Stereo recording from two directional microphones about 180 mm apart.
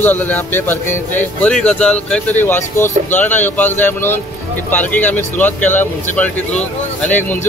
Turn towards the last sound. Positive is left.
turn(degrees=10)  # may be behind; listen again after turning